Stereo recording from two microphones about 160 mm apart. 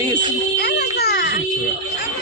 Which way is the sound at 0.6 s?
80° left.